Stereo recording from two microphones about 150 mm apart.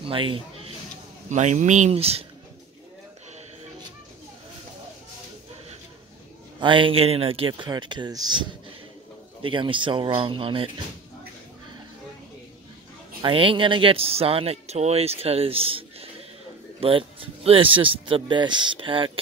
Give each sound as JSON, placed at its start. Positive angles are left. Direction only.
{"t": 0.0, "sound": "speech", "side_deg": -35}
{"t": 1.3, "sound": "speech", "side_deg": -55}
{"t": 6.6, "sound": "speech", "side_deg": -35}
{"t": 13.2, "sound": "speech", "side_deg": -35}